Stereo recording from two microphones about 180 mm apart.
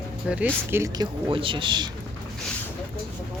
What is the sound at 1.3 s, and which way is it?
Speech, 30° right (ahead or behind).